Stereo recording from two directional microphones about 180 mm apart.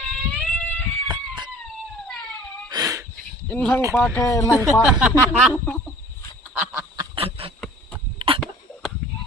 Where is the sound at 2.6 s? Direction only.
20° right (ahead or behind).